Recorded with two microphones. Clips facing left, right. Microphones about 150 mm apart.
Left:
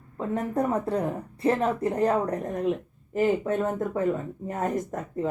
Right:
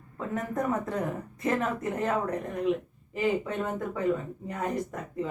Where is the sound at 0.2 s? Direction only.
30° left (ahead or behind).